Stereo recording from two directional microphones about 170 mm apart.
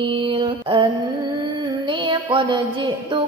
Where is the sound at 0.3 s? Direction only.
30° right (ahead or behind).